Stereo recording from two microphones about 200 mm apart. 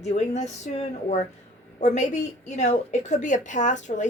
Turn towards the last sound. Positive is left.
turn(degrees=35)  # may be behind; listen again after turning